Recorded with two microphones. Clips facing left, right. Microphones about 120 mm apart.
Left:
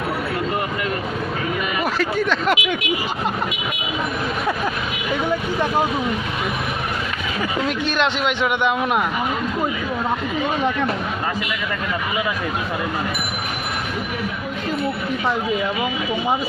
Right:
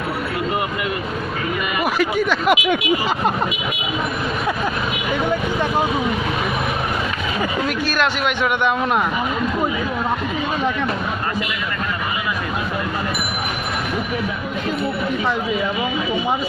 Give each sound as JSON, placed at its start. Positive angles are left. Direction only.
{"t": 1.8, "sound": "speech", "side_deg": -10}
{"t": 7.9, "sound": "a man's voice", "side_deg": 20}